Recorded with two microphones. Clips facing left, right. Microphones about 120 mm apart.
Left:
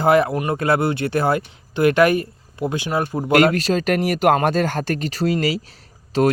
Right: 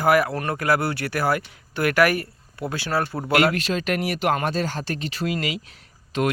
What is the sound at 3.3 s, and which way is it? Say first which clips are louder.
Speech: left 5 dB; 40° left (ahead or behind).